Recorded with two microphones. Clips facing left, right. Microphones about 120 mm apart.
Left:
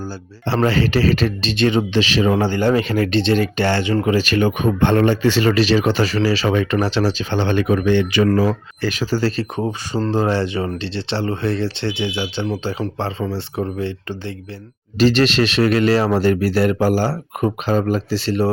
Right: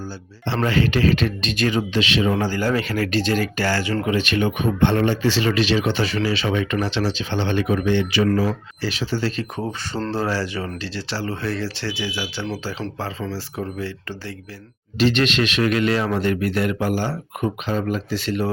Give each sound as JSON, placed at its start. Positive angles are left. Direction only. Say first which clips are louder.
{"t": 0.4, "sound": "speech", "louder": "left 3 dB", "side_deg": 35}
{"t": 4.0, "sound": "speech", "louder": "left 3 dB", "side_deg": 35}
{"t": 9.6, "sound": "speech", "louder": "left 5 dB", "side_deg": 15}
{"t": 14.9, "sound": "speech", "louder": "left 4 dB", "side_deg": 35}